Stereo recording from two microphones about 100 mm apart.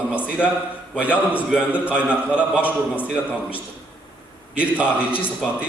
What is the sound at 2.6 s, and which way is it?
Speech, 20° left (ahead or behind).